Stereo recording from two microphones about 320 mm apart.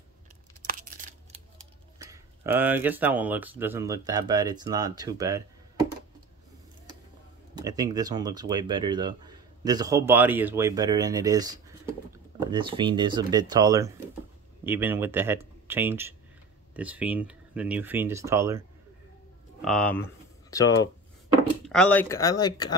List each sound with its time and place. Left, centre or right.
0.7 s a sound: right
2.0 s speech: centre
7.5 s speech: centre
19.6 s speech: centre